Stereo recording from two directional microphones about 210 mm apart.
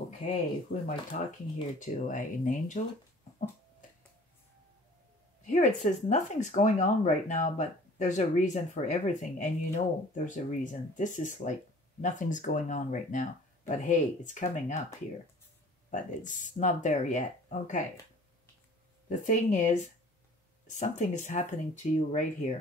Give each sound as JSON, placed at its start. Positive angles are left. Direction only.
{"t": 0.7, "sound": "speech", "side_deg": 40}
{"t": 5.4, "sound": "speech", "side_deg": 35}
{"t": 15.9, "sound": "speech", "side_deg": 35}
{"t": 19.0, "sound": "speech", "side_deg": 35}